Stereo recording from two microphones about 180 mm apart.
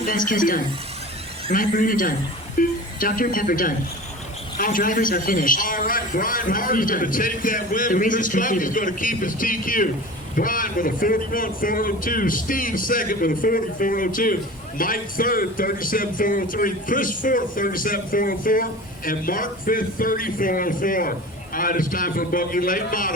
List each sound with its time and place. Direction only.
0.0 s a man's voice: 50° left (ahead or behind)